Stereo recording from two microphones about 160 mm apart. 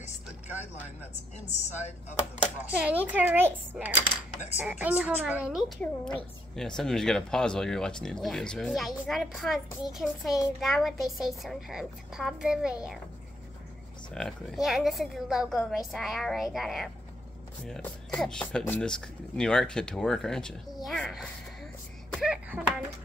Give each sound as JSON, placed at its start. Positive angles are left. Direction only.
{"t": 1.5, "sound": "speech", "side_deg": 45}
{"t": 2.8, "sound": "a child's voice", "side_deg": -10}
{"t": 5.8, "sound": "speech", "side_deg": 5}
{"t": 14.1, "sound": "speech", "side_deg": 0}
{"t": 22.2, "sound": "a sound", "side_deg": -10}